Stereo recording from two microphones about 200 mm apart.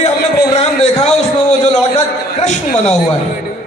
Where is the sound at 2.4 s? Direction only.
35° left (ahead or behind).